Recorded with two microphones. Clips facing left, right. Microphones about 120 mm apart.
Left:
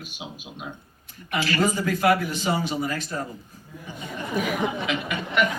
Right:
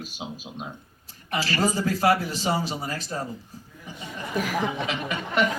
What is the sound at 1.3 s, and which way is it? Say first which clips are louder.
A man's voice: left 1 dB; 35° right (ahead or behind).